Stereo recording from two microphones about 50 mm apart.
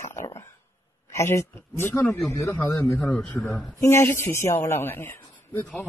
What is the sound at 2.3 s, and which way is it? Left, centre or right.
Speech, left.